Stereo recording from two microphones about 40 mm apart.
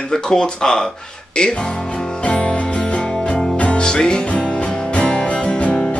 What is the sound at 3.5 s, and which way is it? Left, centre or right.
Music, left.